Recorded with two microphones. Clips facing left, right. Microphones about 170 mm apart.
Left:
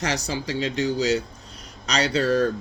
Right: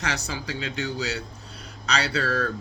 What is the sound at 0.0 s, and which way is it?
Speech, 35° left (ahead or behind).